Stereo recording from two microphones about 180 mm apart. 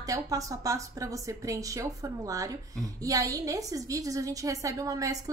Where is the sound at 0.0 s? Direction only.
20° right (ahead or behind).